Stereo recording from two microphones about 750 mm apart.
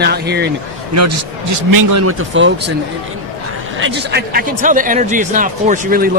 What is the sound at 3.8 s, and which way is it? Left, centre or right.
Speech, centre.